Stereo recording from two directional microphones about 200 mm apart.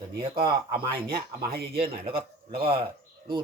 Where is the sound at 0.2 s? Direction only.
25° right (ahead or behind).